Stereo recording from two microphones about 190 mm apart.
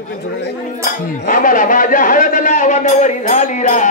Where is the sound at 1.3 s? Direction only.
45° left (ahead or behind).